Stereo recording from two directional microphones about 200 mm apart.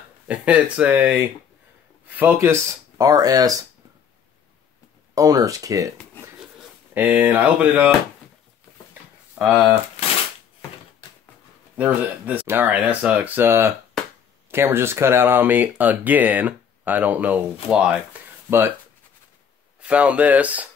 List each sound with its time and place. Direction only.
0.3 s speech: 5° right (ahead or behind)
5.1 s speech: 15° right (ahead or behind)
6.9 s speech: 10° right (ahead or behind)
9.4 s speech: 5° right (ahead or behind)
11.7 s speech: 10° right (ahead or behind)
19.8 s speech: 5° right (ahead or behind)